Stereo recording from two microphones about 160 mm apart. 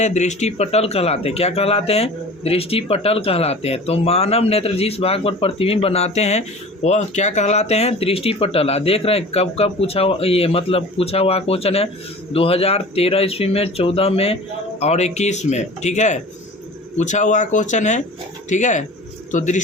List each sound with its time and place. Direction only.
0.0 s speech: 45° left (ahead or behind)